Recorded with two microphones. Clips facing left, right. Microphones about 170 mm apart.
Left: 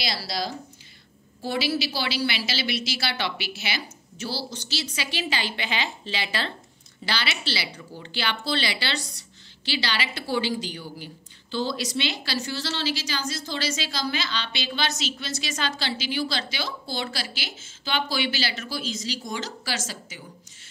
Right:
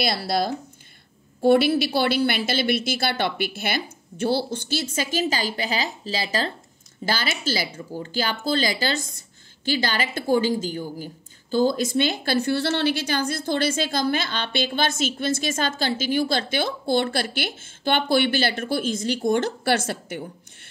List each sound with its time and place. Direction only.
0.0 s a woman's voice: 55° right (ahead or behind)